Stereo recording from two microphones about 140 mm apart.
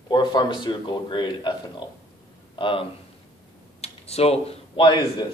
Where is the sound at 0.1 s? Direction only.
30° left (ahead or behind).